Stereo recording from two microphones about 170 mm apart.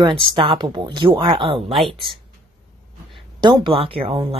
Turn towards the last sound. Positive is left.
turn(degrees=-35)  # may be behind; listen again after turning